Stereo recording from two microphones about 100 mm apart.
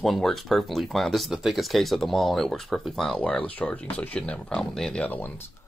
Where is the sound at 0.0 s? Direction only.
5° left (ahead or behind).